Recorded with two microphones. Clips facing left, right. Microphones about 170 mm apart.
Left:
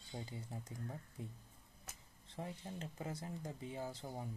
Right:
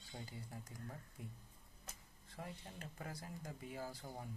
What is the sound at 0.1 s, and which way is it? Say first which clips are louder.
Speech: left 4 dB; 20° left (ahead or behind).